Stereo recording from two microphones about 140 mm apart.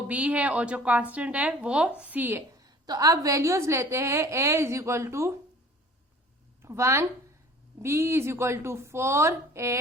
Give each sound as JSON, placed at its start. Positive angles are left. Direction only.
{"t": 0.1, "sound": "speech", "side_deg": -10}
{"t": 2.6, "sound": "a woman's voice", "side_deg": -25}
{"t": 6.6, "sound": "a woman's voice", "side_deg": -20}